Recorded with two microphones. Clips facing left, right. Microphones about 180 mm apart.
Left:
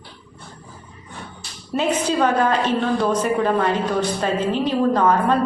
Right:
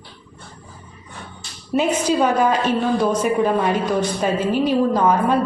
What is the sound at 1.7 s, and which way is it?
A woman's voice, 10° right (ahead or behind).